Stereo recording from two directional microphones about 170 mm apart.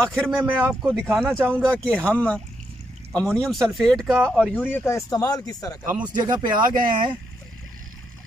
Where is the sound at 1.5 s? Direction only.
5° left (ahead or behind).